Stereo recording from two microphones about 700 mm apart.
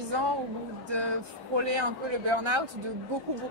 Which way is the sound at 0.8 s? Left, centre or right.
Right.